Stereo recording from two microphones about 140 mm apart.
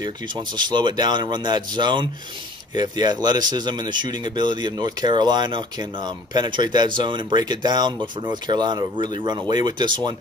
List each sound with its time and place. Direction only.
0.0 s speech: 35° right (ahead or behind)